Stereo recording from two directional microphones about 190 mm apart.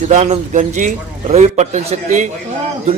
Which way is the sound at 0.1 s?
40° right (ahead or behind).